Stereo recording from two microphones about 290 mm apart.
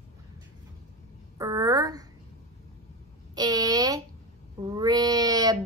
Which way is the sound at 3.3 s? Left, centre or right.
Centre.